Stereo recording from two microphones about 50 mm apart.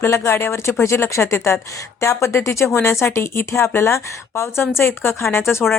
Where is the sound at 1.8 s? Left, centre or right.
Left.